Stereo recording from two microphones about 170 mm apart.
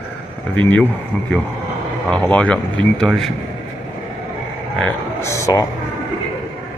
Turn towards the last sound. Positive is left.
turn(degrees=20)  # may be behind; listen again after turning